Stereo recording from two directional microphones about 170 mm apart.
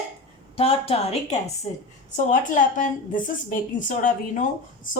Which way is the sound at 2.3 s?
50° left (ahead or behind).